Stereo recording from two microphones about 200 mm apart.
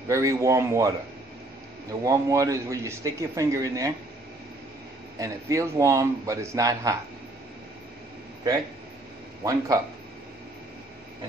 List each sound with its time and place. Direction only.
0.1 s speech: 15° right (ahead or behind)
5.2 s speech: 15° right (ahead or behind)
9.4 s speech: 15° right (ahead or behind)